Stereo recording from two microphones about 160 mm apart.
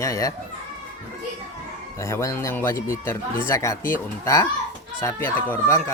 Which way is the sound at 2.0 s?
20° left (ahead or behind).